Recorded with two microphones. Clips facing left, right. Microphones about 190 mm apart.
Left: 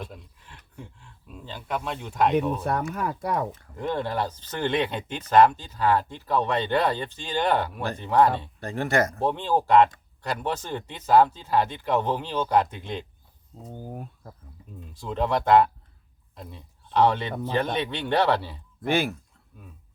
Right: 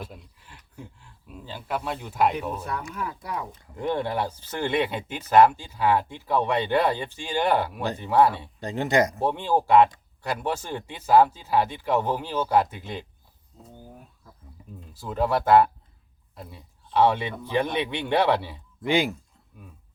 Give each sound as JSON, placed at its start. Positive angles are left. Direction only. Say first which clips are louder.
{"t": 0.0, "sound": "a sound", "louder": "left 1 dB", "side_deg": -5}
{"t": 2.6, "sound": "speech", "louder": "left 5 dB", "side_deg": 55}
{"t": 3.6, "sound": "speech", "louder": "right 1 dB", "side_deg": -15}
{"t": 14.9, "sound": "speech", "louder": "right 1 dB", "side_deg": -5}